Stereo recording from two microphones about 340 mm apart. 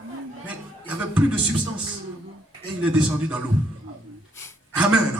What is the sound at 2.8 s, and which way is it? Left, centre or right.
Speech, centre.